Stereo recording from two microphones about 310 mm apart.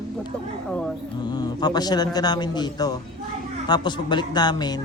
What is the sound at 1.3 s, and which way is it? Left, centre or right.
A man's voice, centre.